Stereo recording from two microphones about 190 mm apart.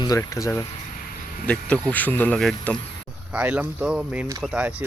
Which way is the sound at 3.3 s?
10° right (ahead or behind).